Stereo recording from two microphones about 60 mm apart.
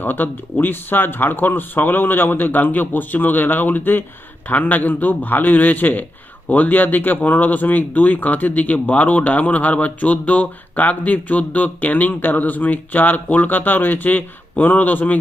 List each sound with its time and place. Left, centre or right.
0.0 s speech: left